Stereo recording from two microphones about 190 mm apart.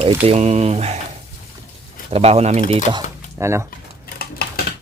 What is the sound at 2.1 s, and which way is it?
Speech, 30° right (ahead or behind).